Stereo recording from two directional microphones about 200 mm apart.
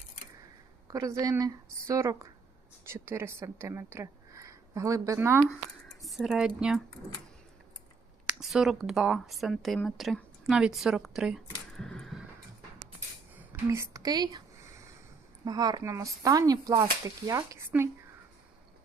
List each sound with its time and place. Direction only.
0.9 s a woman's voice: 15° right (ahead or behind)
6.0 s speech: centre (ahead or behind)
8.3 s a woman's voice: centre (ahead or behind)
13.5 s speech: 15° right (ahead or behind)